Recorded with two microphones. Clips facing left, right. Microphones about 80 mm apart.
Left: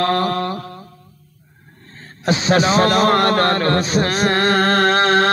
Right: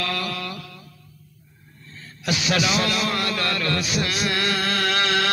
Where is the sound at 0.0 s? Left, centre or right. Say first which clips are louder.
Left 10 dB; left.